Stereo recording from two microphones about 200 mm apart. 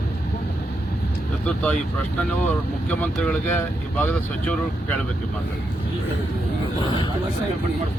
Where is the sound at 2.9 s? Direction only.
5° left (ahead or behind).